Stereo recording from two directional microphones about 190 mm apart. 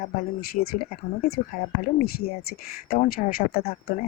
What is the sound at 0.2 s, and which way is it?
Speech, 45° left (ahead or behind).